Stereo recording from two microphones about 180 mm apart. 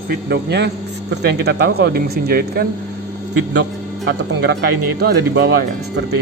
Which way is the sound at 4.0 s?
75° right (ahead or behind).